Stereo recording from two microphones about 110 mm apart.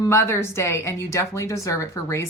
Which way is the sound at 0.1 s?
25° left (ahead or behind).